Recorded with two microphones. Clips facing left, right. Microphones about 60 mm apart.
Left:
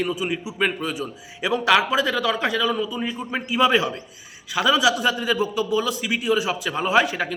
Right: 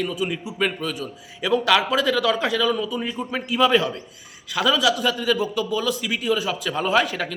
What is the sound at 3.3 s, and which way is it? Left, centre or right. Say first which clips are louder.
A man's voice: even; centre.